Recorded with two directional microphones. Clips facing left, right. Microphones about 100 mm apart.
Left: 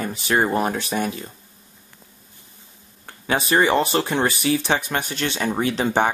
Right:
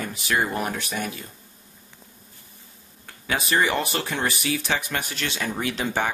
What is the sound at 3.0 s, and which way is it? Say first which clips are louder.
Speech: left 5 dB; 30° left (ahead or behind).